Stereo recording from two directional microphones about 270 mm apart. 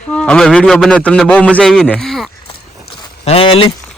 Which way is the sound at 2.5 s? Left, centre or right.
Left.